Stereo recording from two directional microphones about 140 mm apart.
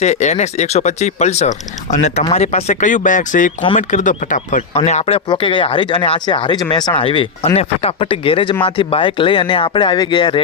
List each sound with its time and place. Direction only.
0.0 s speech: 55° left (ahead or behind)
4.9 s speech: 50° left (ahead or behind); by 10.4 s 35° left (ahead or behind)